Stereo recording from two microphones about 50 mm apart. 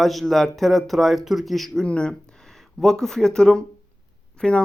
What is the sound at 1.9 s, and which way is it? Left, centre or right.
Speech, centre.